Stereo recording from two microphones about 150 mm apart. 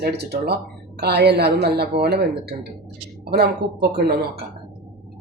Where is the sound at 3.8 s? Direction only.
90° right.